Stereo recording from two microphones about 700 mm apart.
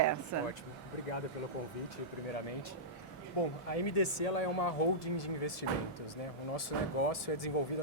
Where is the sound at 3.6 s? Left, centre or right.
Left.